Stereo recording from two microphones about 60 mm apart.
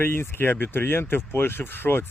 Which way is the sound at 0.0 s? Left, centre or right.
Left.